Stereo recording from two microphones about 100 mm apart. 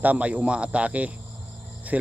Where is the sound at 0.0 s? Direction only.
15° right (ahead or behind).